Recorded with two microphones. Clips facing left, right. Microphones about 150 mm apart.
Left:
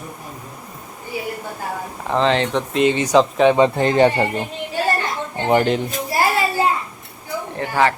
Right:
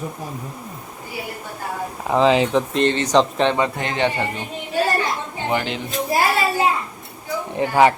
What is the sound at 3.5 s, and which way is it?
Speech, 30° left (ahead or behind).